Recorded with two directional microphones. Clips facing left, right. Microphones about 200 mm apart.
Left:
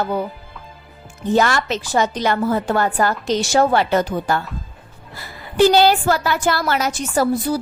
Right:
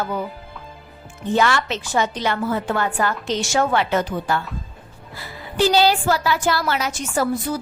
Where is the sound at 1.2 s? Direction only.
40° left (ahead or behind).